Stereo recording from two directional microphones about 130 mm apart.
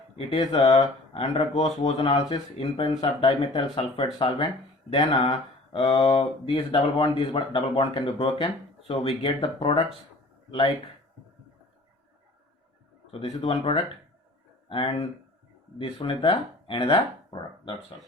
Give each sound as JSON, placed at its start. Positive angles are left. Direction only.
{"t": 0.2, "sound": "speech", "side_deg": 50}
{"t": 13.1, "sound": "speech", "side_deg": 50}